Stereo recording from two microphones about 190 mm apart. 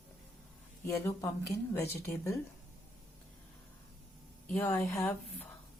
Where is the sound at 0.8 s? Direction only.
15° left (ahead or behind).